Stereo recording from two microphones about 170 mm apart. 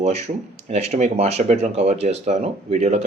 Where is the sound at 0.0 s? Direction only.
40° right (ahead or behind).